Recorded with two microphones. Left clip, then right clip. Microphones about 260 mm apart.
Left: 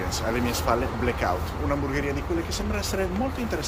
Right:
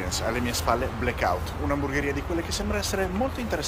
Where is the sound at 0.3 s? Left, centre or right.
Centre.